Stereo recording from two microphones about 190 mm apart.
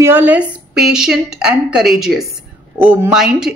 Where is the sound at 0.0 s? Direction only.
10° right (ahead or behind).